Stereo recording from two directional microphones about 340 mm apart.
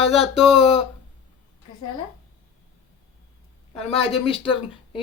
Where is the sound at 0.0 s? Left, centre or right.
Centre.